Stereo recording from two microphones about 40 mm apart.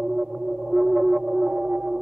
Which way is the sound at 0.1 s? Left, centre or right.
Centre.